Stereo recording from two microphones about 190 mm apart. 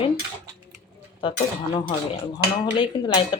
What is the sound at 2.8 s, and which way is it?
Speech, 25° left (ahead or behind).